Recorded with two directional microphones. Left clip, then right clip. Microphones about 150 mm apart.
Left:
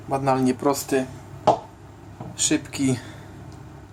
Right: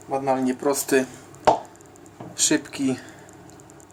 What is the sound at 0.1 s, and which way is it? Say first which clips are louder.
Speech: left 1 dB; 80° left.